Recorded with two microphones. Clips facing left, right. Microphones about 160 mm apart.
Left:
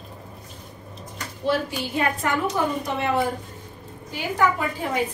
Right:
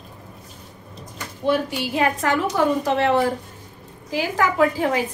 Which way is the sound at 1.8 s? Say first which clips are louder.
Right 3 dB; 90° right.